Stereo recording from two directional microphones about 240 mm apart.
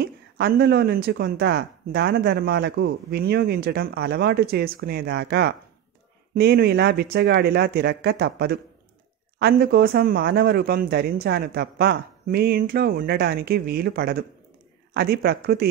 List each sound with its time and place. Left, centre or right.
0.0 s speech: right